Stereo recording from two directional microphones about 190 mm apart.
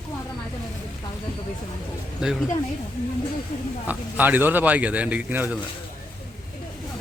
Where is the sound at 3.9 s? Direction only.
10° right (ahead or behind).